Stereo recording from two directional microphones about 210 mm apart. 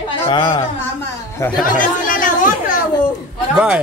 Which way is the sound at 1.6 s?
40° left (ahead or behind).